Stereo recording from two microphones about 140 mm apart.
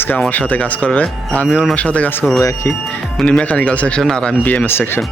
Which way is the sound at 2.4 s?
25° left (ahead or behind).